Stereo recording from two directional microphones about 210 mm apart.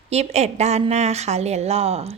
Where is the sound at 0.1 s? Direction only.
30° right (ahead or behind).